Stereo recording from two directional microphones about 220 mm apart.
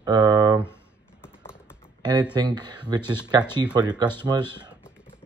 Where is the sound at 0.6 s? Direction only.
10° left (ahead or behind).